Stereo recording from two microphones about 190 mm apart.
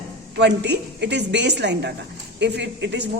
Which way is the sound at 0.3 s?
65° right (ahead or behind).